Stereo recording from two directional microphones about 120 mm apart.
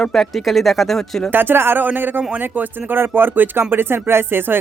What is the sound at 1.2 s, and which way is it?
Speech, 15° right (ahead or behind).